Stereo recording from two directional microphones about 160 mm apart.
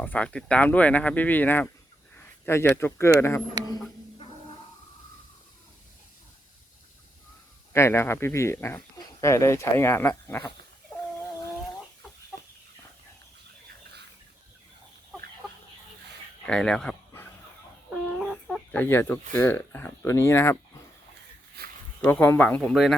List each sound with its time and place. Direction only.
0.0 s speech: 10° left (ahead or behind)
7.7 s speech: 15° left (ahead or behind)
12.3 s chicken: 5° left (ahead or behind)
16.5 s speech: 5° left (ahead or behind)
17.9 s speech: 5° right (ahead or behind); by 20.6 s 15° left (ahead or behind)
22.0 s speech: 10° left (ahead or behind)